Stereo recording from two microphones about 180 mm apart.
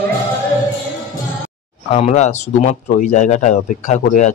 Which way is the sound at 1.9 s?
40° left (ahead or behind).